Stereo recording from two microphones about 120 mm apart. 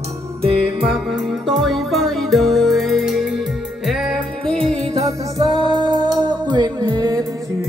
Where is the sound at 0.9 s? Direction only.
Centre (ahead or behind).